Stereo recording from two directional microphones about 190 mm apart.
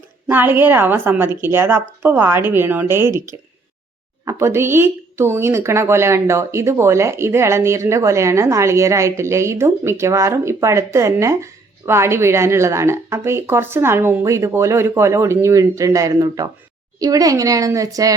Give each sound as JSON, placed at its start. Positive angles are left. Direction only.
{"t": 0.3, "sound": "a woman's voice", "side_deg": -10}